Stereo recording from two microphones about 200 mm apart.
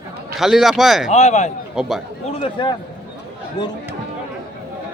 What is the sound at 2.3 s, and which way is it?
Speech, 25° left (ahead or behind).